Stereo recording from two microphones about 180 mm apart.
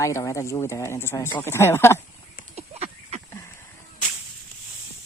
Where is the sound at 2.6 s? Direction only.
35° right (ahead or behind).